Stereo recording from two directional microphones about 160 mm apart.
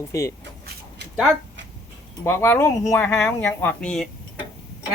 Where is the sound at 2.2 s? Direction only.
15° left (ahead or behind).